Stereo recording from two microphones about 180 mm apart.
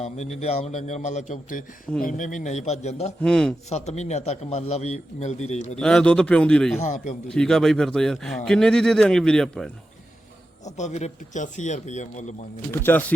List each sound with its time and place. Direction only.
0.0 s a man's voice: 40° left (ahead or behind)
3.2 s a man's voice: 5° left (ahead or behind)
3.7 s a man's voice: 40° left (ahead or behind)
5.8 s a man's voice: 5° left (ahead or behind)
6.7 s a man's voice: 40° left (ahead or behind)
7.3 s a man's voice: 5° left (ahead or behind)
10.7 s a man's voice: 40° left (ahead or behind)
12.7 s speech: 10° left (ahead or behind)